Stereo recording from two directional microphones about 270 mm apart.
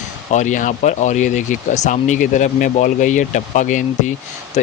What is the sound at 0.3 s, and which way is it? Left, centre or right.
Speech, left.